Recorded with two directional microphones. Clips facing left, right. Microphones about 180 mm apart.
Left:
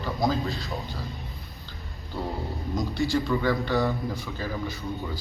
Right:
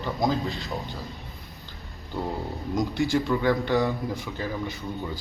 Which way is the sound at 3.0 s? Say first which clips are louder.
Even; 20° right (ahead or behind).